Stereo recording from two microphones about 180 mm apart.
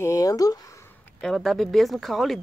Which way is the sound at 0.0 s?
20° left (ahead or behind).